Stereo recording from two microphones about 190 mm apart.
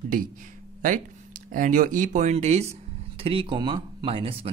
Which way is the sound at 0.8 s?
45° right (ahead or behind).